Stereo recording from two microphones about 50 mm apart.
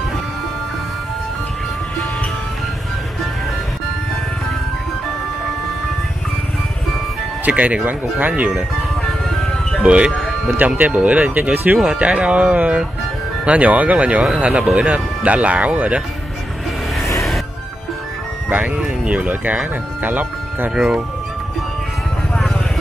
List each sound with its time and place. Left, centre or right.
7.4 s speech: right
9.8 s speech: centre; by 11.8 s right
12.0 s speech: right
18.8 s speech: right
20.7 s speech: centre